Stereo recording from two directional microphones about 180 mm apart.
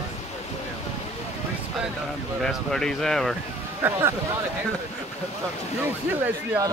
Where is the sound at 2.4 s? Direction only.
Centre (ahead or behind).